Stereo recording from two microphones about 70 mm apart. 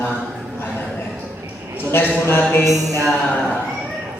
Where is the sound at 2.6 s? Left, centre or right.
Right.